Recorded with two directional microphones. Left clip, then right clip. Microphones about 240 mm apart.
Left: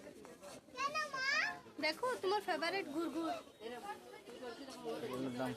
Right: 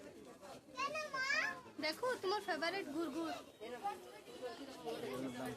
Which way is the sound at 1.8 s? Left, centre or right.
Centre.